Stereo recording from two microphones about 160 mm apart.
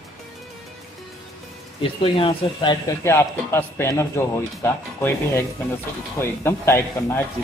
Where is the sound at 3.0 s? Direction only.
15° left (ahead or behind).